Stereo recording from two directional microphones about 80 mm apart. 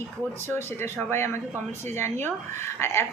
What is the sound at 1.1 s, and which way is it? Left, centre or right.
Speech, left.